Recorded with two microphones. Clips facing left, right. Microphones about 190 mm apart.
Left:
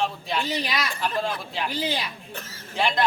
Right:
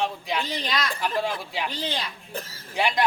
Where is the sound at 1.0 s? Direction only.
10° right (ahead or behind).